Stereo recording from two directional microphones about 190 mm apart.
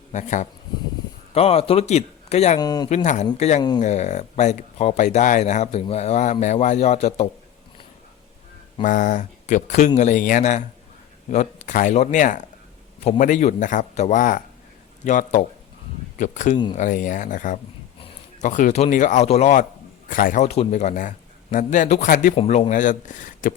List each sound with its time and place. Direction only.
0.1 s speech: 40° left (ahead or behind)
2.6 s speech: 20° left (ahead or behind)
2.9 s speech: 40° left (ahead or behind)
8.8 s a man's voice: 40° left (ahead or behind)
22.4 s speech: 35° left (ahead or behind)